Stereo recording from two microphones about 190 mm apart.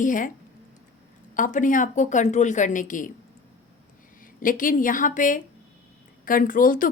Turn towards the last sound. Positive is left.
turn(degrees=45)  # may be behind; listen again after turning